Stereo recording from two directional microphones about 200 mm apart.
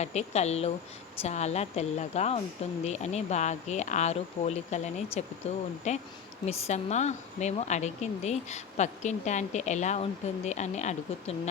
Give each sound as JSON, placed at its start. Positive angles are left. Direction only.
{"t": 0.0, "sound": "speech", "side_deg": 35}